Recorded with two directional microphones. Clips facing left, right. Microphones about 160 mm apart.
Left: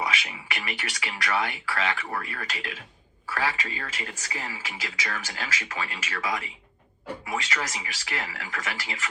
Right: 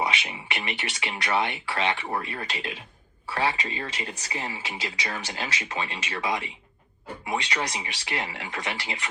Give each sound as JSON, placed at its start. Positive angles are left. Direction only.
{"t": 0.0, "sound": "speech", "side_deg": -25}